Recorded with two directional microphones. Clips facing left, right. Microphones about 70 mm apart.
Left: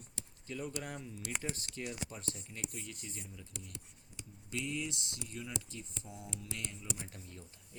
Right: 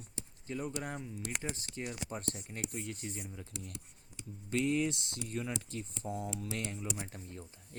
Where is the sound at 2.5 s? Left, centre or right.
Right.